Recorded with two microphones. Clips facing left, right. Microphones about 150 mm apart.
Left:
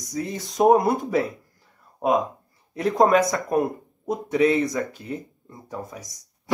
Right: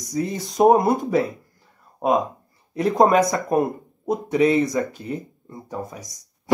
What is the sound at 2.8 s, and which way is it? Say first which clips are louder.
Speech: right 2 dB; 5° right (ahead or behind).